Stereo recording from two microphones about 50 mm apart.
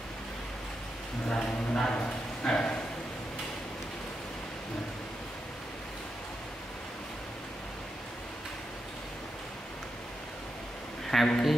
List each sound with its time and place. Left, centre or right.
1.3 s speech: centre
11.1 s speech: centre